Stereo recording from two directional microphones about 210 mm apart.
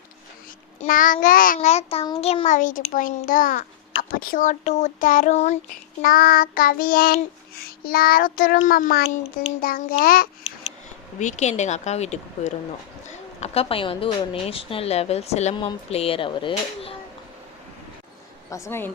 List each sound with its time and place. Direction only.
0.8 s a child's voice: 40° left (ahead or behind)
6.0 s child singing: 40° left (ahead or behind)
11.2 s a child's voice: 35° left (ahead or behind)
18.5 s speech: 10° left (ahead or behind)